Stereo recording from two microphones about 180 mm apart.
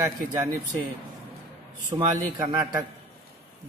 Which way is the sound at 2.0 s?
20° right (ahead or behind).